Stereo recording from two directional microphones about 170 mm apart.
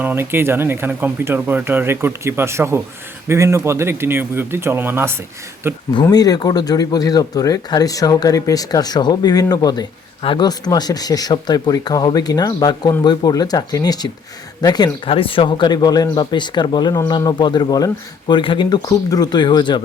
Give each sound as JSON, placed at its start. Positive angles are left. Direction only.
{"t": 0.0, "sound": "speech", "side_deg": -10}
{"t": 5.9, "sound": "speech", "side_deg": 25}